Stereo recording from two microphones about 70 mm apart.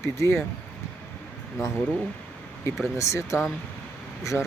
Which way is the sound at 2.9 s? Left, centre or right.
Left.